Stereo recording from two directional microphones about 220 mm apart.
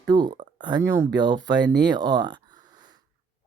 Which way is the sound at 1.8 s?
20° right (ahead or behind).